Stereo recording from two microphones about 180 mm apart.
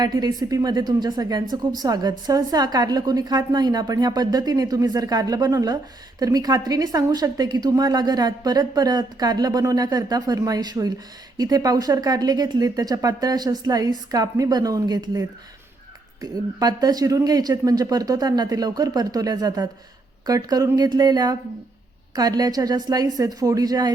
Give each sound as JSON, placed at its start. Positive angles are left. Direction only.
{"t": 0.0, "sound": "a woman's voice", "side_deg": -20}
{"t": 16.6, "sound": "a woman's voice", "side_deg": -20}